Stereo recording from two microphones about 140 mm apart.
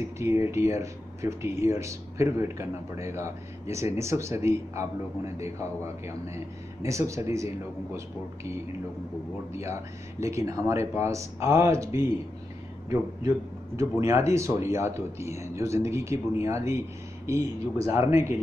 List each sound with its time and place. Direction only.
0.0 s speech: 20° right (ahead or behind)
6.8 s speech: 20° right (ahead or behind)
9.5 s speech: 20° right (ahead or behind)
13.7 s speech: 20° right (ahead or behind)